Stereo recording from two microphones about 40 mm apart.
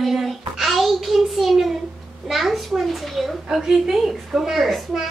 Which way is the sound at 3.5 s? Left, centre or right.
Centre.